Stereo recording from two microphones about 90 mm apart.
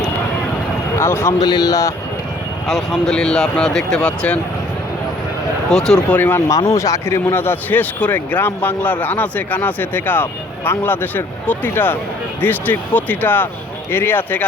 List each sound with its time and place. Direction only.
0.9 s speech: 30° left (ahead or behind)
1.4 s speech: 50° left (ahead or behind)
2.6 s speech: 5° left (ahead or behind)
5.7 s speech: 5° left (ahead or behind)
6.1 s speech: 20° left (ahead or behind)
6.7 s speech: 40° left (ahead or behind); by 14.4 s 20° left (ahead or behind)